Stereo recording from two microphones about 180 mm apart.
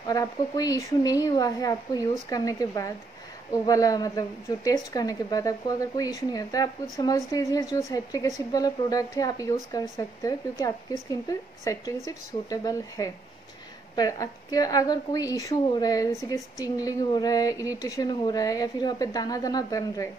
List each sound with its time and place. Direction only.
0.0 s a woman's voice: 20° left (ahead or behind)